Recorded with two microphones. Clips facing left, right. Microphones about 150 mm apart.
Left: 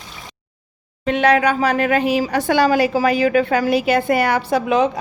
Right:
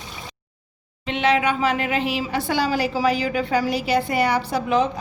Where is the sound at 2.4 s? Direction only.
60° left (ahead or behind).